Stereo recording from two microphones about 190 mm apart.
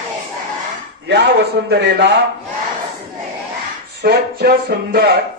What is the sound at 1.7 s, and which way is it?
Music, 65° right (ahead or behind).